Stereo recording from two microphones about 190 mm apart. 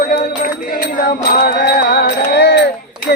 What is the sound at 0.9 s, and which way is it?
Music, 50° left (ahead or behind).